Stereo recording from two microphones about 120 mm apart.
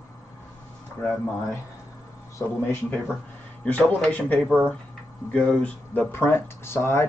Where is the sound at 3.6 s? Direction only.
10° left (ahead or behind).